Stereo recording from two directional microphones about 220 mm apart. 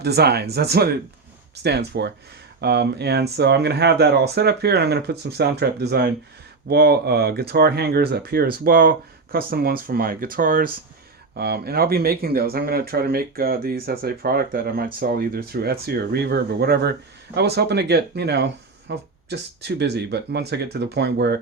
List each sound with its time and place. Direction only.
0.0 s speech: 50° right (ahead or behind)